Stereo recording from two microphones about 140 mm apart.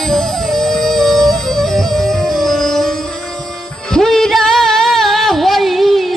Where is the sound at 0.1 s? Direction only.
5° left (ahead or behind).